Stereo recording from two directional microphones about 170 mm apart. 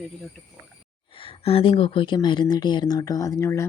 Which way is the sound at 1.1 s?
35° left (ahead or behind).